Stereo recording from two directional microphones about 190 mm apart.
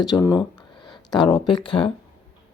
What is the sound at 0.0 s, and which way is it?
Speech, 20° left (ahead or behind).